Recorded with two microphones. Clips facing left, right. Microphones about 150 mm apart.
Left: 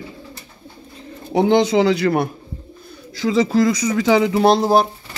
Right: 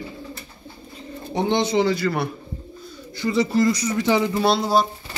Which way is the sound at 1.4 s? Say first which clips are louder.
Left 5 dB; 90° left.